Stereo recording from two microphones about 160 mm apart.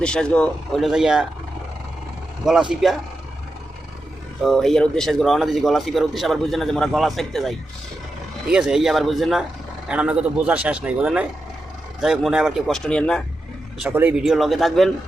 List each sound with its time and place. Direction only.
0.0 s a man's voice: 5° left (ahead or behind)
2.5 s a man's voice: 5° right (ahead or behind)
4.4 s a man's voice: centre (ahead or behind)
13.9 s a man's voice: 10° right (ahead or behind)